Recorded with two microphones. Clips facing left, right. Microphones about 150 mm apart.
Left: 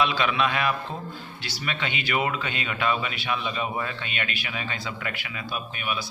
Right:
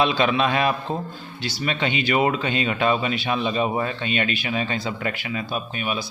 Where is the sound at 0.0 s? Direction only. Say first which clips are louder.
Right 4 dB; 30° right (ahead or behind).